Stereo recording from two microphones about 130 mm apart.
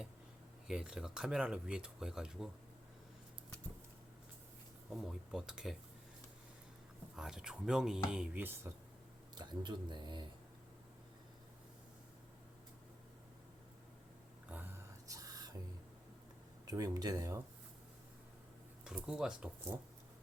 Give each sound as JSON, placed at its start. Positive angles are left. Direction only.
{"t": 0.7, "sound": "speech", "side_deg": -5}
{"t": 4.9, "sound": "speech", "side_deg": -5}
{"t": 7.2, "sound": "speech", "side_deg": -5}
{"t": 9.3, "sound": "speech", "side_deg": -35}
{"t": 14.5, "sound": "a sound", "side_deg": -15}
{"t": 15.0, "sound": "a sound", "side_deg": -25}
{"t": 16.6, "sound": "speech", "side_deg": -30}
{"t": 18.9, "sound": "speech", "side_deg": -5}